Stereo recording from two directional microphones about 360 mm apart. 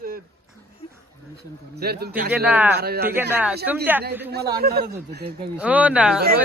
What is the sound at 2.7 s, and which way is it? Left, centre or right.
Speech, right.